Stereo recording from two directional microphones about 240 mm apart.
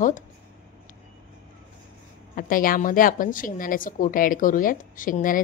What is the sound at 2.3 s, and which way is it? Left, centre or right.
A woman's voice, left.